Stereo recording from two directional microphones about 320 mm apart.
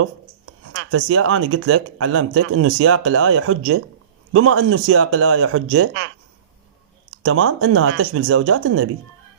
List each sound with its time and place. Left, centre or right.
0.7 s speech: right
7.2 s speech: right